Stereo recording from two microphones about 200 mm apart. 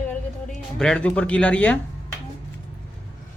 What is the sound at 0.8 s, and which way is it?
Speech, 5° left (ahead or behind).